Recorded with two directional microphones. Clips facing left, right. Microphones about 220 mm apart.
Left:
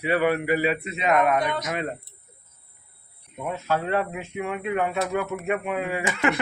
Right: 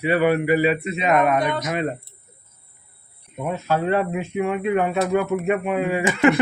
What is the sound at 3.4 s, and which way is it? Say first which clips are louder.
Speech: right 4 dB; 20° right (ahead or behind).